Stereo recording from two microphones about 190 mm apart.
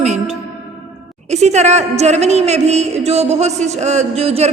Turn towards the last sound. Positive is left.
turn(degrees=-35)  # may be behind; listen again after turning